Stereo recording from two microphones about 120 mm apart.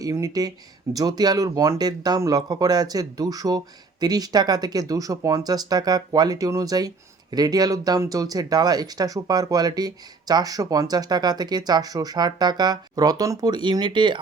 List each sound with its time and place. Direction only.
0.0 s speech: 30° right (ahead or behind)